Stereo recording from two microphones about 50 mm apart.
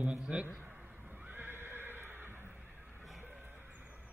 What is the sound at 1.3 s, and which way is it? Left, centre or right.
Horse, right.